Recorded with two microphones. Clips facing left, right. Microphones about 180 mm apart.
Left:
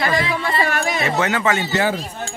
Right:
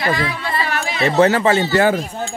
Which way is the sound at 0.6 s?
45° left (ahead or behind).